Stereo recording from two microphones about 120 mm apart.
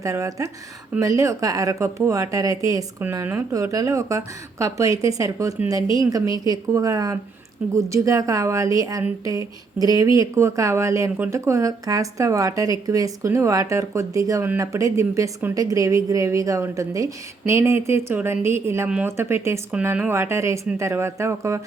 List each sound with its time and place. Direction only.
0.0 s speech: 25° right (ahead or behind)